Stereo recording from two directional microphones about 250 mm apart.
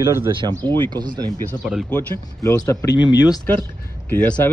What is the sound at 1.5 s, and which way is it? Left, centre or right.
Speech, centre.